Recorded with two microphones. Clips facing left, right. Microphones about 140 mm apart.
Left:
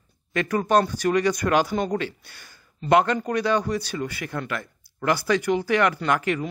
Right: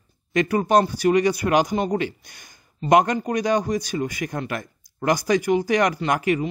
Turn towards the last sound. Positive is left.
turn(degrees=-15)  # may be behind; listen again after turning